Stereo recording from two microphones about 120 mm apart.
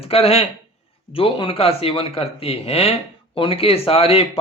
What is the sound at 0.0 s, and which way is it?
Speech, 55° left (ahead or behind).